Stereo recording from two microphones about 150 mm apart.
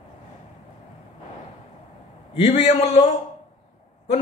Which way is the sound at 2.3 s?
45° left (ahead or behind).